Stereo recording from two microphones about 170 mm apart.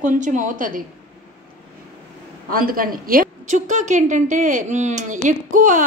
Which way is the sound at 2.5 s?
60° right (ahead or behind).